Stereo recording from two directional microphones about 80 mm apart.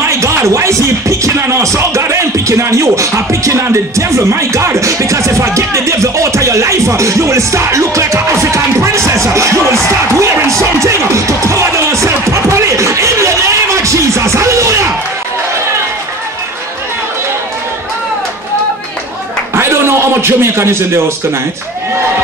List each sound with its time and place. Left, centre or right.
0.1 s speech: right
13.8 s music: right
19.5 s a sound: right